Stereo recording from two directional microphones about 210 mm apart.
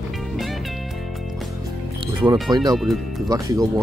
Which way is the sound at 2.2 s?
15° right (ahead or behind).